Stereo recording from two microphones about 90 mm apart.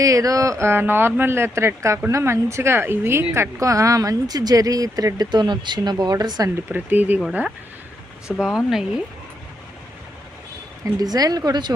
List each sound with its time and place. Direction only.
0.0 s speech: 40° right (ahead or behind)
6.7 s speech: 20° right (ahead or behind)
8.3 s speech: 5° right (ahead or behind)
10.9 s speech: 45° right (ahead or behind)